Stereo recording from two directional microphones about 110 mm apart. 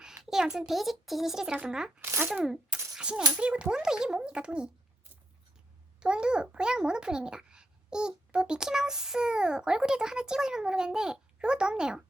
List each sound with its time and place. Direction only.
0.0 s speech: 5° right (ahead or behind)
2.0 s speech: 20° right (ahead or behind)
2.3 s a child's voice: 5° right (ahead or behind)
2.9 s a sound: 10° right (ahead or behind)
3.3 s a child's voice: 10° right (ahead or behind)
6.0 s a child's voice: 10° right (ahead or behind)